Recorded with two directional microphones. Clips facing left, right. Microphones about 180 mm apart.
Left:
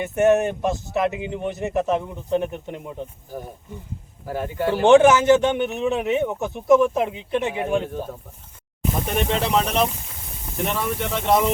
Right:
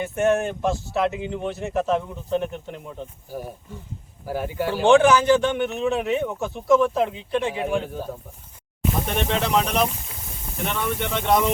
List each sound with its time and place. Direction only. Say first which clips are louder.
0.0 s a man's voice: left 3 dB; 20° left (ahead or behind)
4.3 s speech: left 1 dB; 5° right (ahead or behind)
4.9 s speech: left 2 dB; 20° left (ahead or behind)
8.8 s speech: left 1 dB; centre (ahead or behind)